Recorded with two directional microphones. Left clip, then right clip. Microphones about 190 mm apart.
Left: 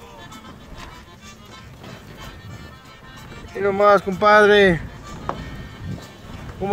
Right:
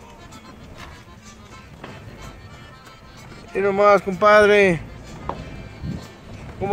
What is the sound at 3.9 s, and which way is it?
Speech, centre (ahead or behind).